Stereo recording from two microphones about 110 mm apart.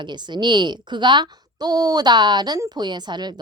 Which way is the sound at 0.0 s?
45° right (ahead or behind).